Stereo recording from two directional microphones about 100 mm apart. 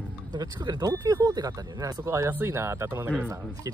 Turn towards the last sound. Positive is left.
turn(degrees=-25)  # may be behind; listen again after turning